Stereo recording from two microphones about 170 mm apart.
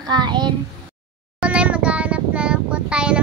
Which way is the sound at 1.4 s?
5° right (ahead or behind).